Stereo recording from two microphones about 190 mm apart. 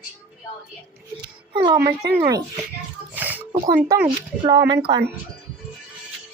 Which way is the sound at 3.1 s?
10° right (ahead or behind).